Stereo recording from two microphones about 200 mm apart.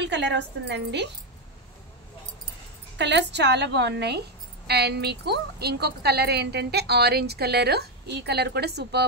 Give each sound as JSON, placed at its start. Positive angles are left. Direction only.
{"t": 0.0, "sound": "a woman's voice", "side_deg": -60}
{"t": 3.0, "sound": "a woman's voice", "side_deg": -60}